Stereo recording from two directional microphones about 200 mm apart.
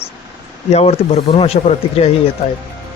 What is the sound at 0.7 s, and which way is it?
Speech, 30° left (ahead or behind).